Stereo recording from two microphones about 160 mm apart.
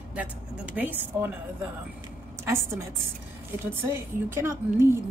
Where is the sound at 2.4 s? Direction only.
15° right (ahead or behind).